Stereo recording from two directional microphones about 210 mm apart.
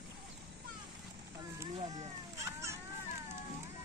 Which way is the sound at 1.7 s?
30° right (ahead or behind).